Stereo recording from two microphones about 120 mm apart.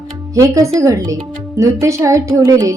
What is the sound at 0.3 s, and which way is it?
Speech, 25° right (ahead or behind).